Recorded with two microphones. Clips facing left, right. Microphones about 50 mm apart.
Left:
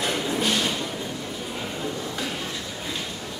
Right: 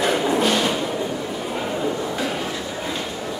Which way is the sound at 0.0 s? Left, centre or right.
Centre.